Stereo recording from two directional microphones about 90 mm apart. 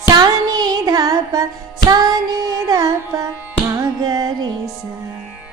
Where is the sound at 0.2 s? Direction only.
45° right (ahead or behind).